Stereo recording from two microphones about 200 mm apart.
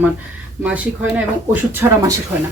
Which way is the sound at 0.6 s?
5° right (ahead or behind).